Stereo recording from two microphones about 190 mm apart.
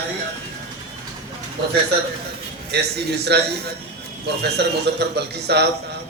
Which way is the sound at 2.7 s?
60° right (ahead or behind).